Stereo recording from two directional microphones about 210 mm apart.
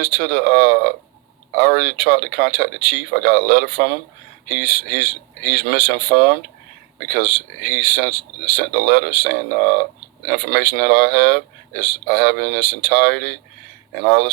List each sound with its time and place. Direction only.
0.0 s speech: 45° right (ahead or behind)